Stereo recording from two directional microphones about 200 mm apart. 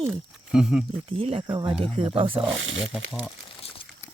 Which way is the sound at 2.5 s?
75° right (ahead or behind).